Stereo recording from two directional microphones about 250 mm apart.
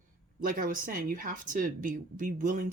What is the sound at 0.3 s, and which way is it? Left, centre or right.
Speech, right.